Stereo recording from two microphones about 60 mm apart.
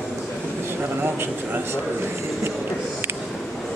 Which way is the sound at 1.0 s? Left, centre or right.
Right.